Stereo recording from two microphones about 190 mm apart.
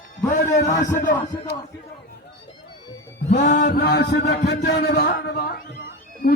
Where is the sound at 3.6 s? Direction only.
55° left (ahead or behind).